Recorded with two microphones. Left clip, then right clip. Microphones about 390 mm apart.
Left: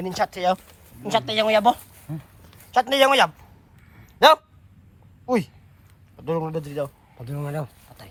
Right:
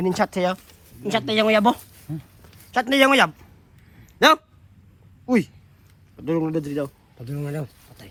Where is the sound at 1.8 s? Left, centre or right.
Left.